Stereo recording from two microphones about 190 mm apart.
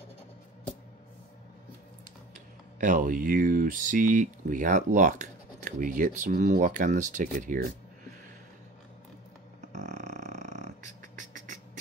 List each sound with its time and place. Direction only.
2.8 s speech: 45° right (ahead or behind)
9.7 s beatboxing: 40° right (ahead or behind)